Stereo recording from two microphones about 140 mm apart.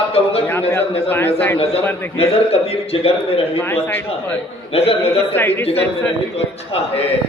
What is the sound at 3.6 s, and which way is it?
Speech, 15° left (ahead or behind).